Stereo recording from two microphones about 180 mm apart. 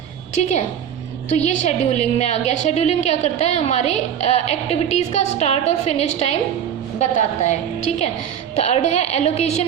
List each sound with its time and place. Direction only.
0.4 s a woman's voice: 40° left (ahead or behind)